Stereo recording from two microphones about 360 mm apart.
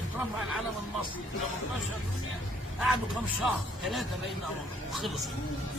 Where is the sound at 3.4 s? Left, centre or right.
Centre.